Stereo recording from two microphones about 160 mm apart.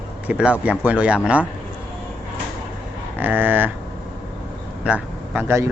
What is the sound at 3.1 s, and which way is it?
Speech, 10° right (ahead or behind).